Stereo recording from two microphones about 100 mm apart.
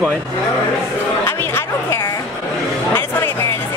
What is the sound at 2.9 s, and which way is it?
Music, 25° left (ahead or behind).